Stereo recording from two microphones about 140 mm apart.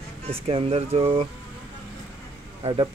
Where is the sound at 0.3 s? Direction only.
45° right (ahead or behind).